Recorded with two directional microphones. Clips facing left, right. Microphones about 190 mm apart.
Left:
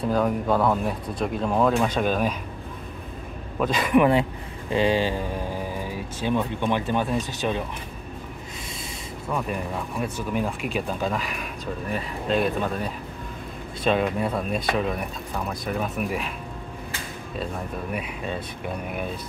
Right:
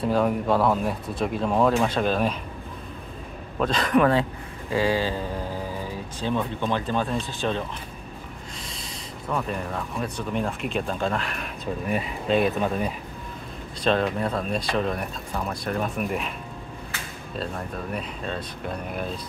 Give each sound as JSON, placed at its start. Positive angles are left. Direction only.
{"t": 0.1, "sound": "speech", "side_deg": 0}
{"t": 3.5, "sound": "speech", "side_deg": 5}
{"t": 6.2, "sound": "speech", "side_deg": 15}
{"t": 9.3, "sound": "speech", "side_deg": 10}
{"t": 13.8, "sound": "speech", "side_deg": 5}
{"t": 17.9, "sound": "speech", "side_deg": 10}